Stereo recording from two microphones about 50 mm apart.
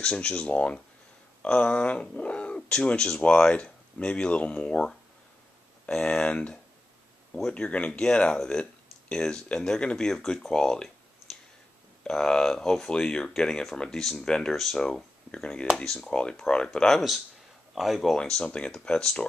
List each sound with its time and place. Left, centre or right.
0.0 s speech: centre
7.5 s speech: left
12.0 s speech: centre
14.9 s a sound: centre
15.8 s speech: centre
17.7 s speech: centre
18.1 s speech: centre